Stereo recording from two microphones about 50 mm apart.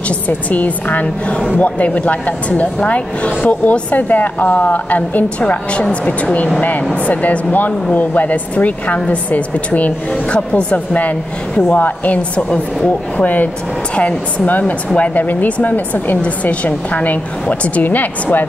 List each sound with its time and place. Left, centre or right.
0.5 s a woman's voice: left
1.0 s a woman's voice: left
5.4 s a woman's voice: left